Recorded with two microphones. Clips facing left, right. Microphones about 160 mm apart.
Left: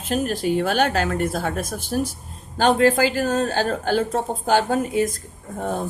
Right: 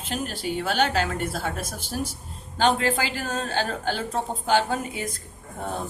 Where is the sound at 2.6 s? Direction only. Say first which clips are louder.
Left 6 dB; 40° left (ahead or behind).